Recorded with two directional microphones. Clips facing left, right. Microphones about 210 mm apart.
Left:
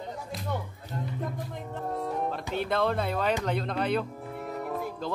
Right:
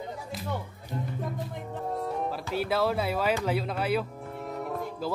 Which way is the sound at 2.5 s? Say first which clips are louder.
Right 1 dB; 5° right (ahead or behind).